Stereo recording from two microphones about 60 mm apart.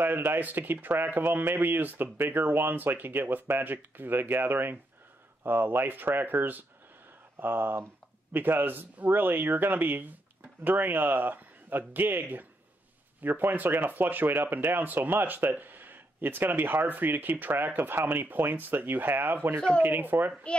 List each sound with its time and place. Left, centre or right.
0.0 s speech: right